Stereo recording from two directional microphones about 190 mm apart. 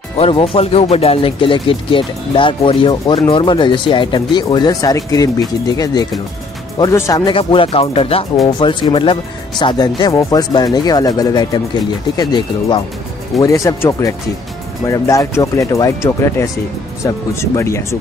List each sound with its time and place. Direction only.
0.2 s speech: 30° left (ahead or behind); by 17.8 s 15° left (ahead or behind)